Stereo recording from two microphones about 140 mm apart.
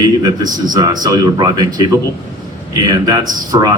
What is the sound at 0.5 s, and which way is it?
Speech, 30° right (ahead or behind).